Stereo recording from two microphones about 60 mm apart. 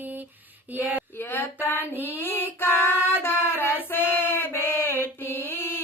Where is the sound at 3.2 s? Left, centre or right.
Left.